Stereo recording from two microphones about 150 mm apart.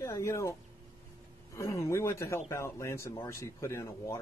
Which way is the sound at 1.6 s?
20° left (ahead or behind).